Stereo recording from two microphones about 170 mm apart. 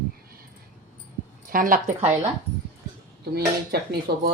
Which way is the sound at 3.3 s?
70° right (ahead or behind).